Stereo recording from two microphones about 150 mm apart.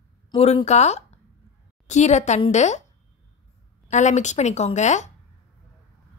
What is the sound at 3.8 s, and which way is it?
Speech, 55° left (ahead or behind).